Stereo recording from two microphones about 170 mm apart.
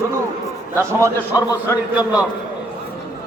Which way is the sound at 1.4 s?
20° left (ahead or behind).